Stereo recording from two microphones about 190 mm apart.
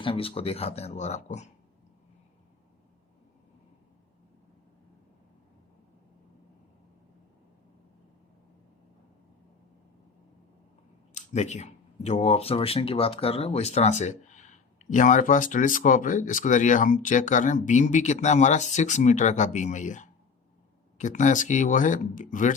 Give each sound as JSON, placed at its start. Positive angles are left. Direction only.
{"t": 0.0, "sound": "speech", "side_deg": 30}
{"t": 11.1, "sound": "speech", "side_deg": 40}